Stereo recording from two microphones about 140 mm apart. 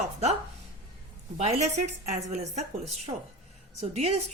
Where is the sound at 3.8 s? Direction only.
45° right (ahead or behind).